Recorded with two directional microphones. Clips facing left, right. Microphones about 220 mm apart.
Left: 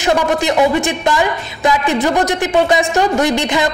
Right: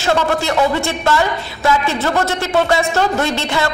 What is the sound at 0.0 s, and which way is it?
Speech, 15° left (ahead or behind).